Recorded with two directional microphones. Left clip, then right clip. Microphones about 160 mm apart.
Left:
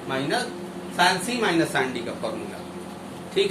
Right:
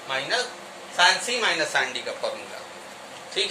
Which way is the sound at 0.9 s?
20° right (ahead or behind).